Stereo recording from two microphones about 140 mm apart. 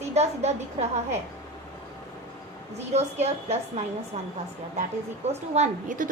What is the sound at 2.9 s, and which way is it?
Speech, 50° right (ahead or behind).